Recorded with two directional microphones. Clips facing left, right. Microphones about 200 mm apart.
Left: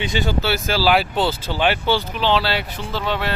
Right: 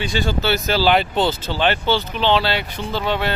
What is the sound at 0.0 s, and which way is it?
Speech, 20° left (ahead or behind).